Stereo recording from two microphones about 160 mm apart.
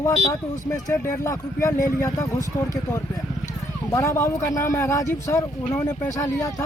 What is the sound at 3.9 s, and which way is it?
Speech, 20° left (ahead or behind).